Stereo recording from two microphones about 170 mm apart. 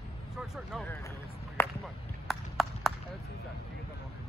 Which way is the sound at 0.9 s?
15° left (ahead or behind).